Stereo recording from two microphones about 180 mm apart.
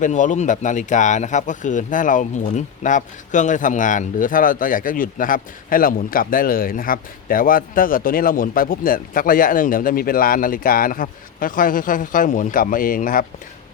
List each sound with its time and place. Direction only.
0.0 s speech: 45° left (ahead or behind)